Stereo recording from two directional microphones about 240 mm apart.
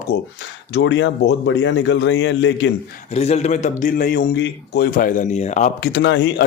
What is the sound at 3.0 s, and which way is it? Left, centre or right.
A man's voice, left.